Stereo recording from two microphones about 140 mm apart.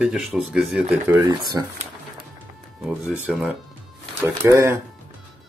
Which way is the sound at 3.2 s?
5° right (ahead or behind).